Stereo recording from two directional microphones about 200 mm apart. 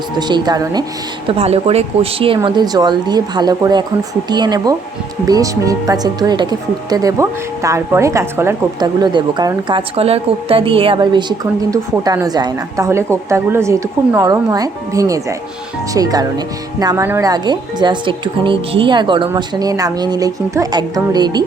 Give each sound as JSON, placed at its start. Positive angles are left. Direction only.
{"t": 0.2, "sound": "speech", "side_deg": -20}
{"t": 1.3, "sound": "speech", "side_deg": -30}